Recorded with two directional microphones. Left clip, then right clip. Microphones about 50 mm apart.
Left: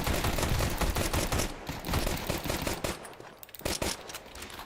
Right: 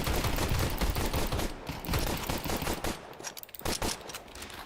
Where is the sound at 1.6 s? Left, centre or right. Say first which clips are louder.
Left 1 dB; centre.